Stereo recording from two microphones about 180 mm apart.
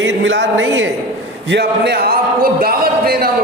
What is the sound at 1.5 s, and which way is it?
A man's voice, 70° right (ahead or behind).